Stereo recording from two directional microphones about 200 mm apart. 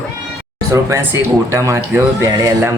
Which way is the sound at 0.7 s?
15° right (ahead or behind).